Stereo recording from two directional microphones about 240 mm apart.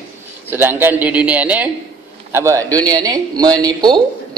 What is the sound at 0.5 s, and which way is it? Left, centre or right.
A man's voice, centre.